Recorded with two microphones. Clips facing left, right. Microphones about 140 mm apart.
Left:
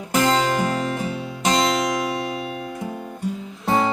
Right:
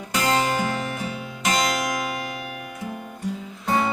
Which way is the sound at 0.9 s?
35° left (ahead or behind).